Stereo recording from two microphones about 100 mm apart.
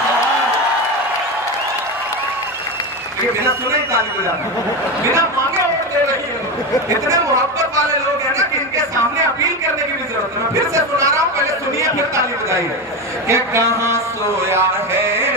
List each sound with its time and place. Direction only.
10.5 s a man's voice: 30° right (ahead or behind)
15.0 s music: 25° right (ahead or behind)